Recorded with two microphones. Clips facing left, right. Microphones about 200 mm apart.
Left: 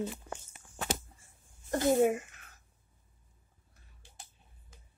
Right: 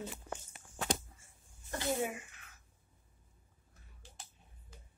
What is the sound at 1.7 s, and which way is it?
Speech, 45° left (ahead or behind).